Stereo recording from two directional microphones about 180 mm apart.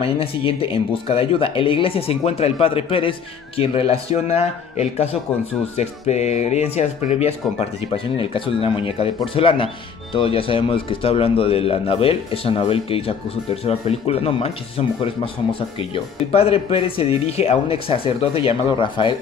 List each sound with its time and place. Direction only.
0.0 s speech: 30° left (ahead or behind)